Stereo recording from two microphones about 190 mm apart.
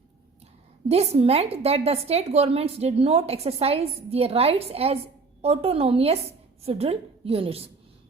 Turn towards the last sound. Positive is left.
turn(degrees=-30)  # may be behind; listen again after turning